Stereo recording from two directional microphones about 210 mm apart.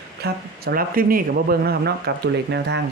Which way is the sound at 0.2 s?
45° right (ahead or behind).